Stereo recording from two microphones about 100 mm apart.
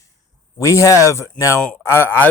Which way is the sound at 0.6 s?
30° left (ahead or behind).